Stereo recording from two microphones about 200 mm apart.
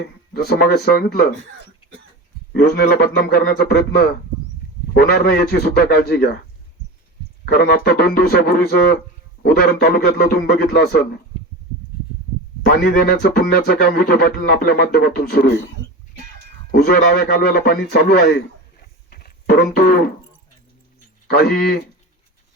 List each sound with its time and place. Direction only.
0.0 s speech: 55° left (ahead or behind)
2.5 s speech: 50° left (ahead or behind)
7.4 s speech: 55° left (ahead or behind)
12.6 s speech: 50° left (ahead or behind)
16.7 s speech: 50° left (ahead or behind)
19.1 s a sound: 50° left (ahead or behind)
21.2 s speech: 55° left (ahead or behind)